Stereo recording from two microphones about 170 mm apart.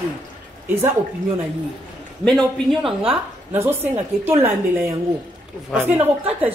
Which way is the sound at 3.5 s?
10° right (ahead or behind).